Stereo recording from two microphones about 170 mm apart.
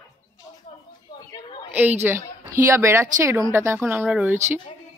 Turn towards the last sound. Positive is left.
turn(degrees=-5)  # may be behind; listen again after turning